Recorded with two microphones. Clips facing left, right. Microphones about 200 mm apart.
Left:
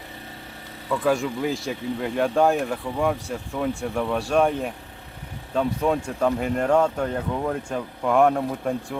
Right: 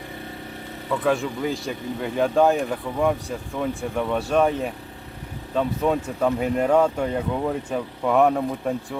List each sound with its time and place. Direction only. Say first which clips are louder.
1.0 s speech: even; centre (ahead or behind)